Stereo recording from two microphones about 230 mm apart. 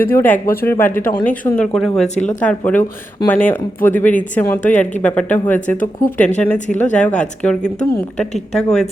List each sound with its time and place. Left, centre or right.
0.1 s a woman's voice: centre
5.5 s speech: left
6.1 s a woman's voice: centre
7.8 s speech: left
8.5 s speech: centre